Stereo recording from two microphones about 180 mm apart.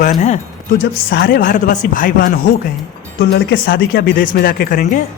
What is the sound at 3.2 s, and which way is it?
Speech, 60° left (ahead or behind).